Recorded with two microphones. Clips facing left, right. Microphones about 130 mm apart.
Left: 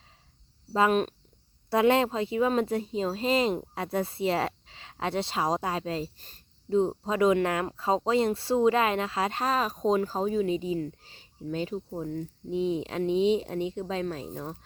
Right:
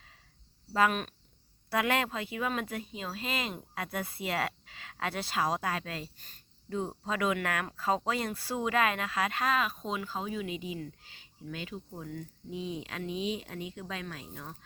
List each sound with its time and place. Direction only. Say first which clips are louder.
0.7 s speech: left 5 dB; 25° left (ahead or behind)